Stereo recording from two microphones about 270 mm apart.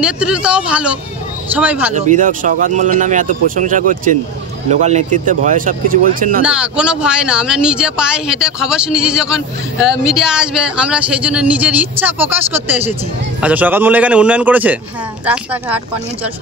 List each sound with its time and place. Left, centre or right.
0.0 s speech: centre
2.0 s speech: right
6.4 s speech: centre